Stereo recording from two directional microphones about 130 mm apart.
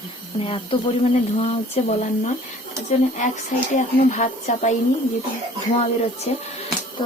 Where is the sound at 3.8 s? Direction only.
70° left (ahead or behind).